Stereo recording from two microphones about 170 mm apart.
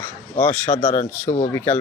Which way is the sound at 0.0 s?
10° left (ahead or behind).